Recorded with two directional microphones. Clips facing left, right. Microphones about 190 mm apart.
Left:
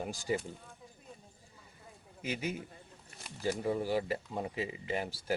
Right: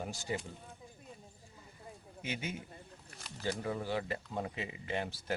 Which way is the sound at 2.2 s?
35° left (ahead or behind).